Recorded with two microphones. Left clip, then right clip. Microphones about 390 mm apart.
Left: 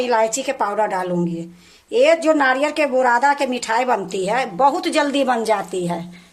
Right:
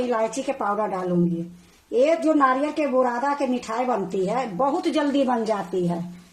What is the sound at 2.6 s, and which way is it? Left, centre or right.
Speech, left.